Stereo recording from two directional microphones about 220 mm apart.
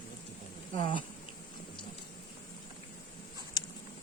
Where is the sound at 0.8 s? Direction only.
20° left (ahead or behind).